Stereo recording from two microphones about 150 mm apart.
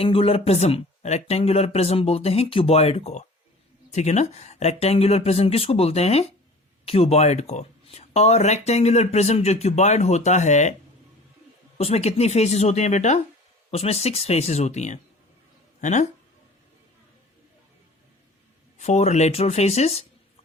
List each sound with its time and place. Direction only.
0.0 s speech: 40° left (ahead or behind)
11.8 s speech: 45° left (ahead or behind)
18.8 s speech: 50° left (ahead or behind)